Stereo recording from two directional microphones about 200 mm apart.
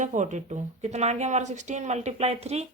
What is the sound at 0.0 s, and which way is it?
Speech, 40° right (ahead or behind).